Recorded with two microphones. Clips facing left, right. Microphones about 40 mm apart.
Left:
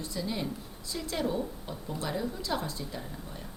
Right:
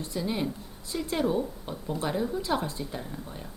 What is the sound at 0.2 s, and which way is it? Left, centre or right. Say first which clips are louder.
A woman's voice: right 4 dB; centre.